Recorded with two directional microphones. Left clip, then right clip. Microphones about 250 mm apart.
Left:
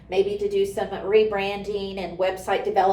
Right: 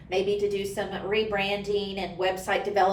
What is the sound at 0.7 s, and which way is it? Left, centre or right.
A woman's voice, centre.